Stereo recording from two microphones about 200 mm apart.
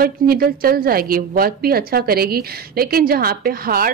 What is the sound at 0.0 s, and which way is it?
Speech, 50° right (ahead or behind).